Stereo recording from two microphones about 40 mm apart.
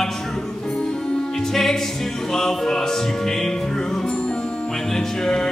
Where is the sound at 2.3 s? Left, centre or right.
Centre.